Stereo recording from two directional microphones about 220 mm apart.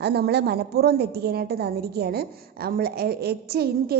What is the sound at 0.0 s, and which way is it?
A woman's voice, 50° right (ahead or behind).